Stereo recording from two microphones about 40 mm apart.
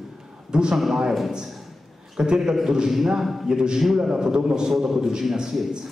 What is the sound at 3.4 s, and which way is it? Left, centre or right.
A man's voice, centre.